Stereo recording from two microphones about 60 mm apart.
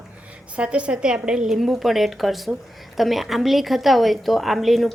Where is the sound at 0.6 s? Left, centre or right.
Centre.